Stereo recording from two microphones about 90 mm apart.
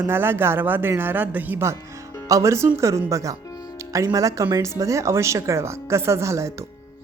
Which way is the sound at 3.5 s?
40° left (ahead or behind).